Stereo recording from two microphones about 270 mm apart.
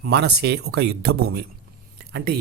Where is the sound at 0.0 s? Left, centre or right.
Right.